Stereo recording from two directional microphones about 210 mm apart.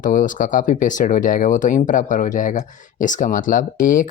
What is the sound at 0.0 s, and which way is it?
Speech, 40° left (ahead or behind).